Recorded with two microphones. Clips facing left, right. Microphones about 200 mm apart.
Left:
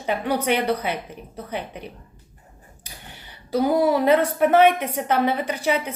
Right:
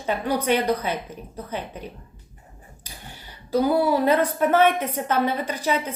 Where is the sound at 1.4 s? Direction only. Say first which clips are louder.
Left 2 dB; 15° left (ahead or behind).